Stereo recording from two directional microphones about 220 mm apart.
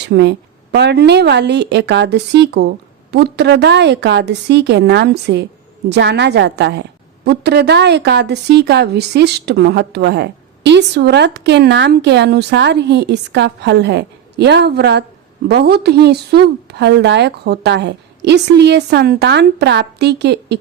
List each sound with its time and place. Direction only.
0.0 s a woman's voice: 50° right (ahead or behind)